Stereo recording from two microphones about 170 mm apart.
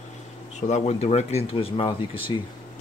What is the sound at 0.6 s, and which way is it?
Speech, 40° left (ahead or behind).